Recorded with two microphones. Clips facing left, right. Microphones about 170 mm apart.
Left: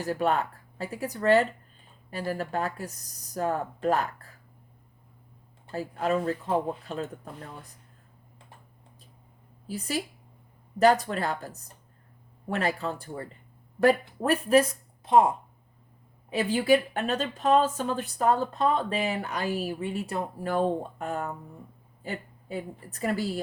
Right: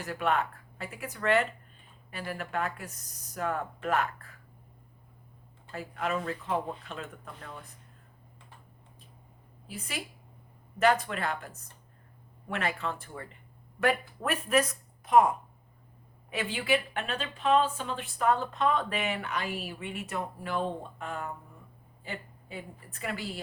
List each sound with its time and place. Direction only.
0.0 s speech: 35° left (ahead or behind)
5.7 s speech: 35° left (ahead or behind)
9.6 s speech: 40° left (ahead or behind)
16.3 s speech: 40° left (ahead or behind)